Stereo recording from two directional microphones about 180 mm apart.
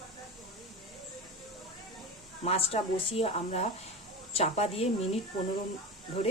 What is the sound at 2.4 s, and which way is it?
Speech, 35° left (ahead or behind).